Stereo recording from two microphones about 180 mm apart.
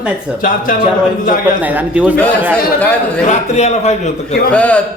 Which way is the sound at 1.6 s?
10° right (ahead or behind).